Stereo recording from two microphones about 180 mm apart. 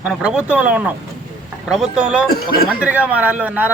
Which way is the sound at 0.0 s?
5° right (ahead or behind).